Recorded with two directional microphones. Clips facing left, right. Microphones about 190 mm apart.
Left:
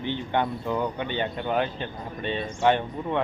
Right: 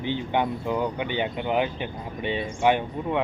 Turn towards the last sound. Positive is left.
turn(degrees=-10)  # may be behind; listen again after turning